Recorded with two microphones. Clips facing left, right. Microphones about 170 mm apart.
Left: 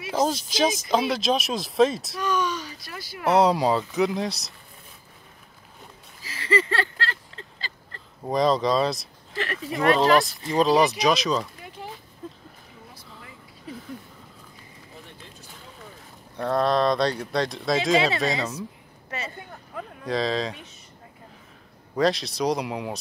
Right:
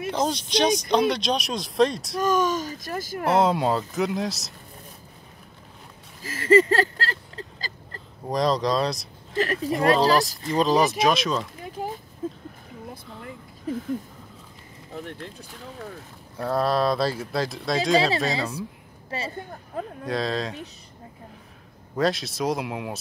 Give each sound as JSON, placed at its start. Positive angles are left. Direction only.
{"t": 0.1, "sound": "speech", "side_deg": 5}
{"t": 2.1, "sound": "speech", "side_deg": -45}
{"t": 3.3, "sound": "speech", "side_deg": 0}
{"t": 6.2, "sound": "a sound", "side_deg": -45}
{"t": 8.3, "sound": "speech", "side_deg": 0}
{"t": 9.4, "sound": "a sound", "side_deg": -40}
{"t": 9.8, "sound": "speech", "side_deg": -35}
{"t": 10.4, "sound": "speech", "side_deg": 0}
{"t": 11.8, "sound": "a sound", "side_deg": -45}
{"t": 16.3, "sound": "speech", "side_deg": -5}
{"t": 19.0, "sound": "speech", "side_deg": -30}
{"t": 20.1, "sound": "speech", "side_deg": 0}
{"t": 21.9, "sound": "speech", "side_deg": 0}